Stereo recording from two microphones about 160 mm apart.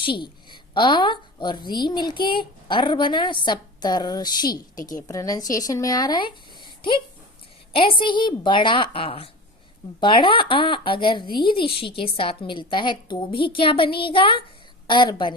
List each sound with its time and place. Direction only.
0.0 s a woman's voice: 30° left (ahead or behind)
7.7 s a woman's voice: 35° left (ahead or behind)